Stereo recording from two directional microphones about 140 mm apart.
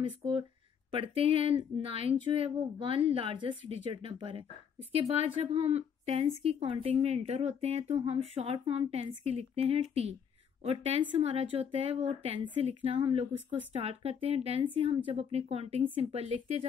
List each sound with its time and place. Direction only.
0.0 s a woman's voice: 40° right (ahead or behind)